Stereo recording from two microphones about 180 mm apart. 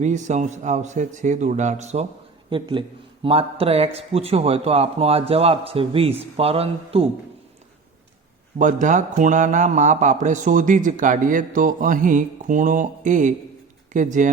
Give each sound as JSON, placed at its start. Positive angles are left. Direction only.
{"t": 0.0, "sound": "speech", "side_deg": -40}
{"t": 2.5, "sound": "a man's voice", "side_deg": -25}
{"t": 8.5, "sound": "a man's voice", "side_deg": -45}